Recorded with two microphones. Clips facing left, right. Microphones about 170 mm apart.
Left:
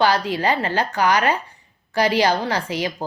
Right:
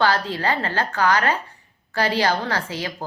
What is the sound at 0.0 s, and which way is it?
Speech, 15° left (ahead or behind).